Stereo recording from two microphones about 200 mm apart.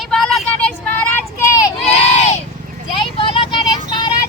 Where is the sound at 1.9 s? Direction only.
30° left (ahead or behind).